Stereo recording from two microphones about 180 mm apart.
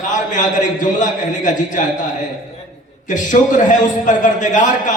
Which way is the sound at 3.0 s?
45° left (ahead or behind).